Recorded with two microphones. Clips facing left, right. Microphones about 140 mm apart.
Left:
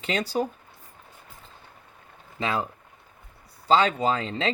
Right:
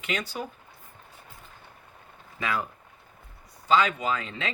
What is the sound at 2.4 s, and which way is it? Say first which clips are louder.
Speech: left 3 dB; 25° left (ahead or behind).